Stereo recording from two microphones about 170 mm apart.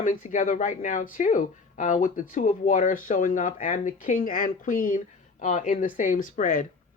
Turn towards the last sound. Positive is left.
turn(degrees=50)  # may be behind; listen again after turning